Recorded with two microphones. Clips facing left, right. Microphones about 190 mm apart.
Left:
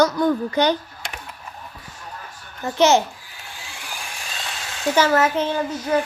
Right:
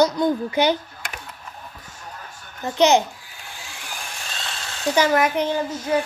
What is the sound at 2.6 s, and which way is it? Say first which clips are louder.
Speech: even; 15° right (ahead or behind).